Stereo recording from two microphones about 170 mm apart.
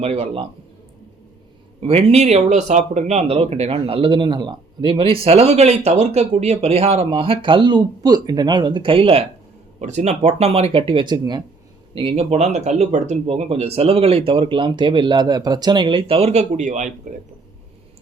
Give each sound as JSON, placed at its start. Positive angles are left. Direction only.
{"t": 0.0, "sound": "speech", "side_deg": -40}
{"t": 1.8, "sound": "speech", "side_deg": -35}